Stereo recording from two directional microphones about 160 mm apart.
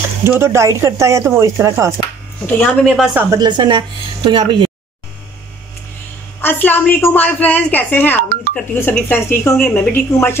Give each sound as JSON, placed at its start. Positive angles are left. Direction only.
{"t": 0.2, "sound": "speech", "side_deg": -15}
{"t": 2.4, "sound": "speech", "side_deg": 5}
{"t": 3.2, "sound": "speech", "side_deg": -20}
{"t": 6.4, "sound": "a woman's voice", "side_deg": 10}